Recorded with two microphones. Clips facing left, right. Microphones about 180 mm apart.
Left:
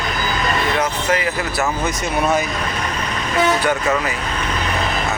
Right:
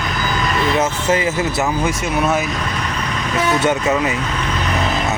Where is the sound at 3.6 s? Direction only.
20° right (ahead or behind).